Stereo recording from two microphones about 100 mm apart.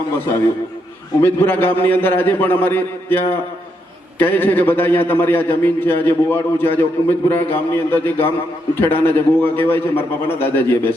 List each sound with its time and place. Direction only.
1.2 s a man's voice: 20° left (ahead or behind)